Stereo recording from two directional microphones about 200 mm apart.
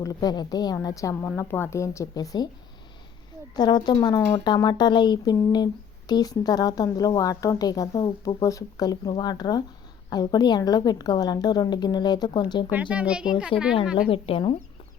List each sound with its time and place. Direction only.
0.0 s a woman's voice: 20° left (ahead or behind)
3.5 s a woman's voice: 20° left (ahead or behind)
12.7 s speech: 5° right (ahead or behind)
13.5 s a woman's voice: 25° left (ahead or behind)